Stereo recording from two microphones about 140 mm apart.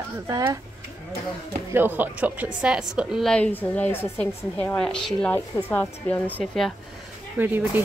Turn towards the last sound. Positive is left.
turn(degrees=-15)  # may be behind; listen again after turning